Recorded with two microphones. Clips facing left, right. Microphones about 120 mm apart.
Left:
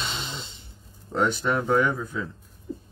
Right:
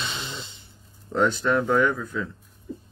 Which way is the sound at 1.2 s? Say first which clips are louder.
Right 2 dB; 15° left (ahead or behind).